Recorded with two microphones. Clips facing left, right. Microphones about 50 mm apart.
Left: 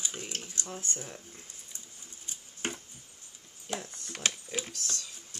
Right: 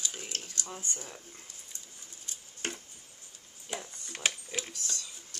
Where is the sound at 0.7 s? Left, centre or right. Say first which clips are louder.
Left 2 dB; centre.